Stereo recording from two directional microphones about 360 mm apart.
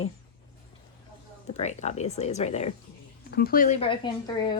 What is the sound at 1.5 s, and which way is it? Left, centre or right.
Speech, centre.